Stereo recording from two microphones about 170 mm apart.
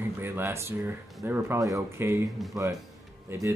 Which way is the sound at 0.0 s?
15° right (ahead or behind).